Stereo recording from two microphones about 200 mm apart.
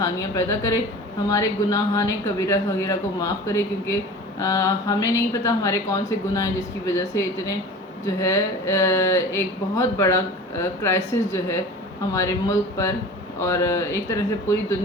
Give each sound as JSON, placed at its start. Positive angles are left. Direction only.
{"t": 0.0, "sound": "speech", "side_deg": 15}